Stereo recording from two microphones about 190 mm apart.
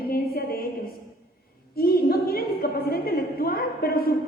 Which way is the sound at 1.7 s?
55° left (ahead or behind).